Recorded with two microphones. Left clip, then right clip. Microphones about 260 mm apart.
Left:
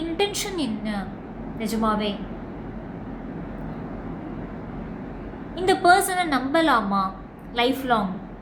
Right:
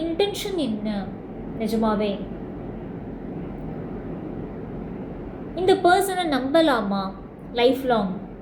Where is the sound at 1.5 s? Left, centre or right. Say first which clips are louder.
Right 1 dB; centre.